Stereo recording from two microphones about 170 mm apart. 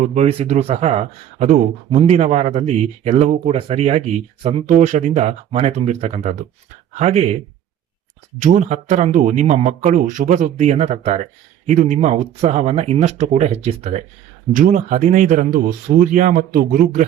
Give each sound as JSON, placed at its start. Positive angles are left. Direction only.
{"t": 0.0, "sound": "speech", "side_deg": -45}
{"t": 8.4, "sound": "speech", "side_deg": -45}